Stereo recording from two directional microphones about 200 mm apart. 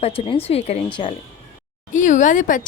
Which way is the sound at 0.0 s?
30° left (ahead or behind).